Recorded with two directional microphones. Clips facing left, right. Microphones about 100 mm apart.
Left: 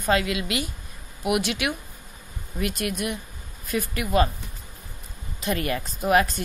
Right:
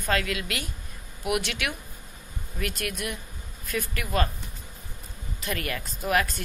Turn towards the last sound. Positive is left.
turn(degrees=25)  # may be behind; listen again after turning